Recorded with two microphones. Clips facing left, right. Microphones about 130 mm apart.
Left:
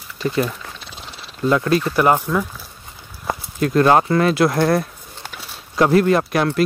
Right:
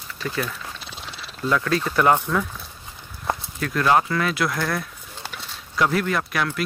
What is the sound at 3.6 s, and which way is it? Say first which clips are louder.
Speech: left 6 dB; 30° left (ahead or behind).